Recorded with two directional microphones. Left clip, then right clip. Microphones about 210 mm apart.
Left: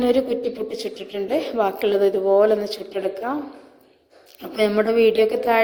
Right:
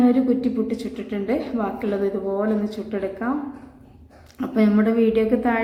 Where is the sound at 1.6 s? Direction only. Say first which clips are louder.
Left 6 dB; 30° left (ahead or behind).